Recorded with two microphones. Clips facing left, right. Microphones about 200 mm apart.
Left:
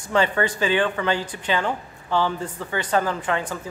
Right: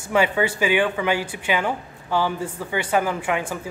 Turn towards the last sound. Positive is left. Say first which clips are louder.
# right 1 dB
turn(degrees=-10)  # may be behind; listen again after turning